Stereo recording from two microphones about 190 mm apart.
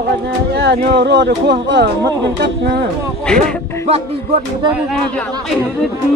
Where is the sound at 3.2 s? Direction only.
5° left (ahead or behind).